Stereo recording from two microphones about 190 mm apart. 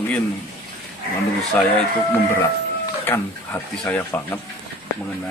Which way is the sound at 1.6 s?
10° left (ahead or behind).